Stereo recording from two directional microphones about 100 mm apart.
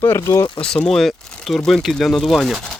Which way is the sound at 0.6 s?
5° left (ahead or behind).